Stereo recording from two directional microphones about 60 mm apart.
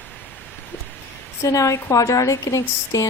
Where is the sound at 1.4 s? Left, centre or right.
Left.